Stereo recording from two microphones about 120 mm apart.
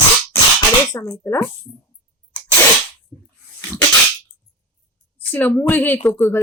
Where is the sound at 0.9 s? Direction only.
25° left (ahead or behind).